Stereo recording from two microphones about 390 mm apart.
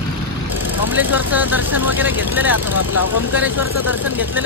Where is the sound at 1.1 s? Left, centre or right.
Centre.